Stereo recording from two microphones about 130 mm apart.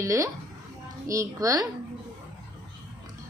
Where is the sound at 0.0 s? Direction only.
25° right (ahead or behind).